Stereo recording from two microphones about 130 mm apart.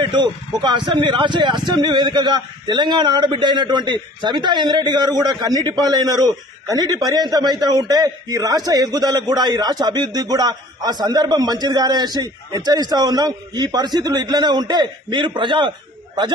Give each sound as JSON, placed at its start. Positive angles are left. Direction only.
{"t": 0.0, "sound": "a man's voice", "side_deg": -35}